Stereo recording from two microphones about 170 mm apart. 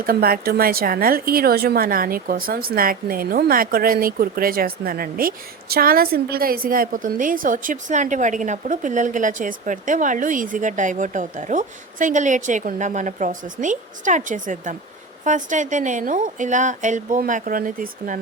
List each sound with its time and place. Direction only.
0.0 s speech: 60° right (ahead or behind)